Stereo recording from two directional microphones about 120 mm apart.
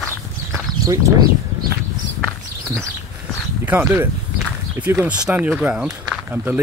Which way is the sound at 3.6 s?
15° right (ahead or behind).